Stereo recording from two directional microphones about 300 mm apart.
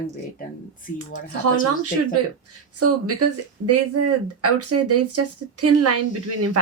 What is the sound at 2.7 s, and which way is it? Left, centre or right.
Speech, right.